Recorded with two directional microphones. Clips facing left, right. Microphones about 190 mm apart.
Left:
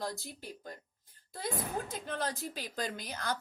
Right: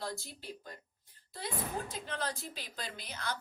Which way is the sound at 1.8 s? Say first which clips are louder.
Left 2 dB; 55° left (ahead or behind).